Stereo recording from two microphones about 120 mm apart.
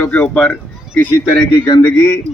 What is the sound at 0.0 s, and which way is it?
Speech, 15° left (ahead or behind).